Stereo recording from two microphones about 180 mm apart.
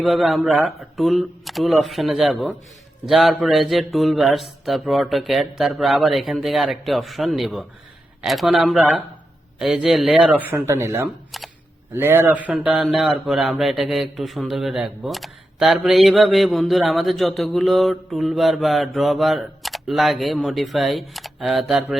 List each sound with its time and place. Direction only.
0.0 s speech: centre (ahead or behind)